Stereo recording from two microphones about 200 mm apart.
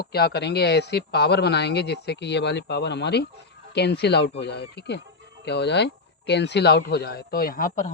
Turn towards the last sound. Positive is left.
turn(degrees=45)  # may be behind; listen again after turning